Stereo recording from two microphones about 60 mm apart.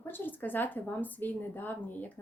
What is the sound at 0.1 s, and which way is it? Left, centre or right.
A woman's voice, left.